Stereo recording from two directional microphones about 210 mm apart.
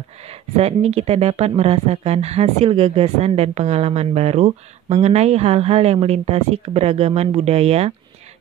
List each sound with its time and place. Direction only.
0.2 s a woman's voice: 30° right (ahead or behind)